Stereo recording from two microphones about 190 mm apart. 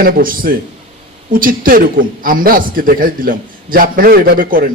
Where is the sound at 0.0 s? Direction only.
50° right (ahead or behind).